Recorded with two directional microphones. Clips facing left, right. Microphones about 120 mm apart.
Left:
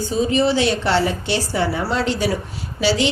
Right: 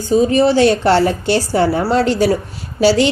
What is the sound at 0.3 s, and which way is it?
A woman's voice, 45° right (ahead or behind).